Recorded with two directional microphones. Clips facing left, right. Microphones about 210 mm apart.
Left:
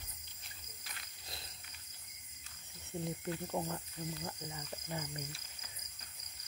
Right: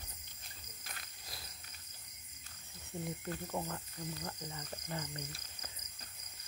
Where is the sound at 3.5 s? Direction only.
15° left (ahead or behind).